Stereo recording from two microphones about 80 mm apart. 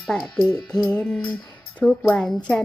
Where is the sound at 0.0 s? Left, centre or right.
Centre.